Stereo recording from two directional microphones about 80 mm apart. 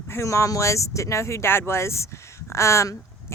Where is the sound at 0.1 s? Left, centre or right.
Left.